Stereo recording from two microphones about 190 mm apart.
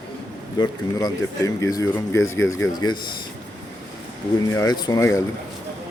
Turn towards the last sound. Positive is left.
turn(degrees=15)  # may be behind; listen again after turning